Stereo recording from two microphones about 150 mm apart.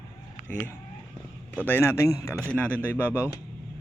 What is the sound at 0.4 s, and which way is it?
A man's voice, 10° left (ahead or behind).